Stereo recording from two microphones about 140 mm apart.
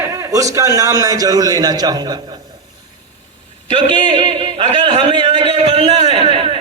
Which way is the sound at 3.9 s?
30° right (ahead or behind).